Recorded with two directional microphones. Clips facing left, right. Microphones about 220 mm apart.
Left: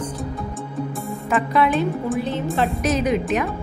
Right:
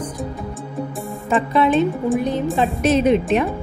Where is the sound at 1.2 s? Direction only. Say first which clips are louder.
Right 2 dB; 25° right (ahead or behind).